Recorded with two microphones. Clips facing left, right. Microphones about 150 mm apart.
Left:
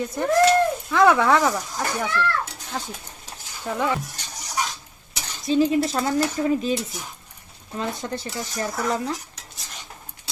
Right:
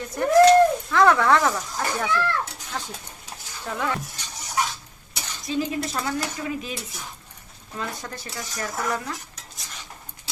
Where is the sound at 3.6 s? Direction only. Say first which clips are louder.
Left 3 dB; 15° left (ahead or behind).